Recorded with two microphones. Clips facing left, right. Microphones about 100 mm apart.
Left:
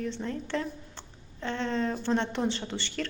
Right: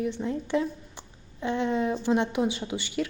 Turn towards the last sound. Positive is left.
turn(degrees=-10)  # may be behind; listen again after turning